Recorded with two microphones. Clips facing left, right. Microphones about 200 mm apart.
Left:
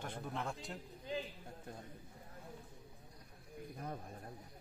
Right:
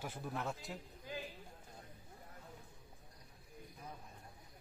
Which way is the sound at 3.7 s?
55° left (ahead or behind).